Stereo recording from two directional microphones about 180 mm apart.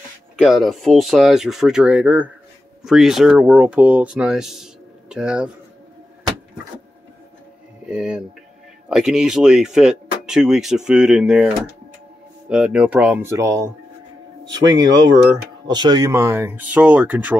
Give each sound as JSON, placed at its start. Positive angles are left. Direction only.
{"t": 0.4, "sound": "speech", "side_deg": 0}
{"t": 7.8, "sound": "speech", "side_deg": -5}
{"t": 14.7, "sound": "speech", "side_deg": -25}